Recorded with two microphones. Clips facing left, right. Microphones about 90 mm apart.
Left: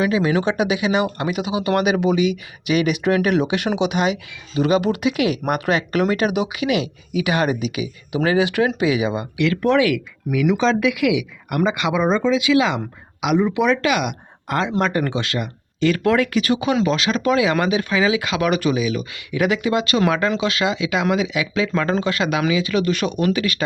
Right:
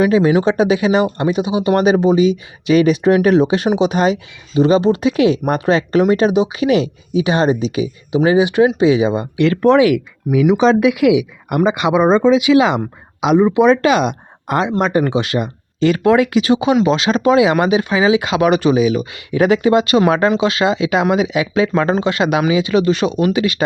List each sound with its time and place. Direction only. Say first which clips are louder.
0.0 s speech: right 6 dB; 25° right (ahead or behind)
10.3 s speech: right 6 dB; 5° right (ahead or behind)
10.6 s speech: right 6 dB; 20° right (ahead or behind)